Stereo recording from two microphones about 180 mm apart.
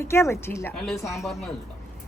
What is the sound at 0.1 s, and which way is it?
Speech, 15° left (ahead or behind).